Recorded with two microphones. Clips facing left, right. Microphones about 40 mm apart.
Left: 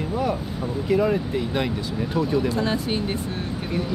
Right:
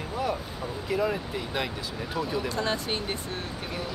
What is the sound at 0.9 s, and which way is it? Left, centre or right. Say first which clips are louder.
Speech: left 7 dB; centre.